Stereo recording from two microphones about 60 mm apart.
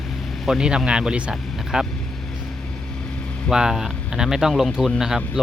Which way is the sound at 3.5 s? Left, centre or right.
Centre.